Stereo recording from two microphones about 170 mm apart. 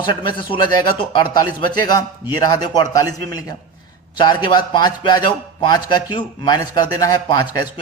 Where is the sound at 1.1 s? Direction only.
25° left (ahead or behind).